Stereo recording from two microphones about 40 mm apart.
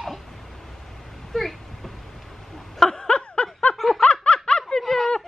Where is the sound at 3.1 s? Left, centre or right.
Left.